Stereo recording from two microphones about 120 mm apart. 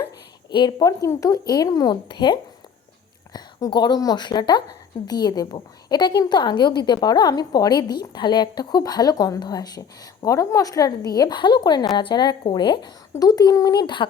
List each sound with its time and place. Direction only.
0.5 s a woman's voice: 35° left (ahead or behind)